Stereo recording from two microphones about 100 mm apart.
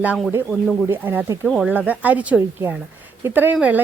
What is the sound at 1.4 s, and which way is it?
Speech, 5° right (ahead or behind).